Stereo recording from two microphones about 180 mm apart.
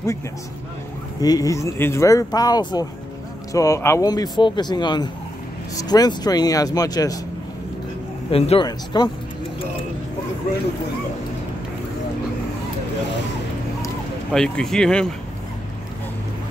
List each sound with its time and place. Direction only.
1.2 s speech: 20° left (ahead or behind)
8.3 s speech: 30° left (ahead or behind)
14.3 s speech: 5° left (ahead or behind)